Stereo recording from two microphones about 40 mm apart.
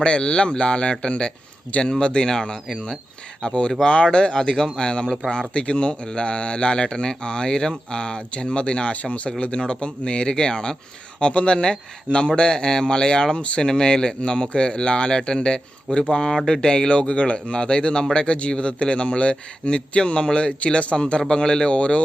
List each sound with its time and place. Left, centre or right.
0.0 s speech: left